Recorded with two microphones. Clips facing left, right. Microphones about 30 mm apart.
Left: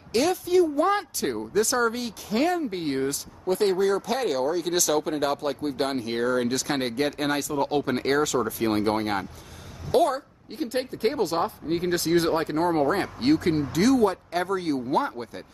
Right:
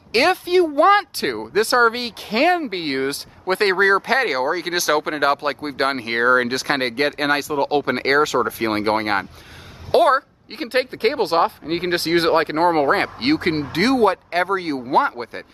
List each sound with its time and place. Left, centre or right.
0.1 s a woman's voice: right